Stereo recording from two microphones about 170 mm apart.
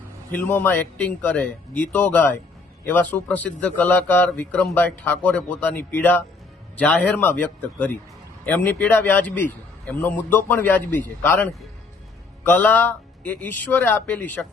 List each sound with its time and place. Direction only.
0.3 s a man's voice: 10° left (ahead or behind)